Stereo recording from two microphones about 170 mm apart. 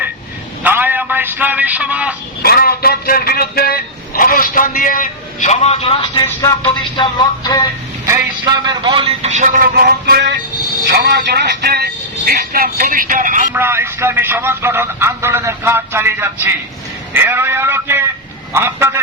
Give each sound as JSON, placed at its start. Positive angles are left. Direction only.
{"t": 0.6, "sound": "a sound", "side_deg": -10}
{"t": 2.4, "sound": "a man's voice", "side_deg": 65}
{"t": 8.0, "sound": "a man's voice", "side_deg": -20}
{"t": 13.5, "sound": "speech", "side_deg": -15}